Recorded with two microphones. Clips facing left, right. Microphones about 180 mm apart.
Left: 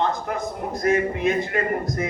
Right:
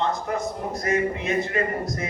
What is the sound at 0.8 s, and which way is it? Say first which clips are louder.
A man's voice: left 4 dB; 55° left (ahead or behind).